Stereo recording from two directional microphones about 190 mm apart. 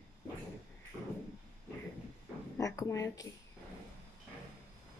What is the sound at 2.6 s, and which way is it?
Speech, 15° left (ahead or behind).